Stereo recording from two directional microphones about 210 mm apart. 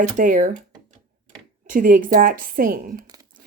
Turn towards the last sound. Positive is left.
turn(degrees=-40)  # may be behind; listen again after turning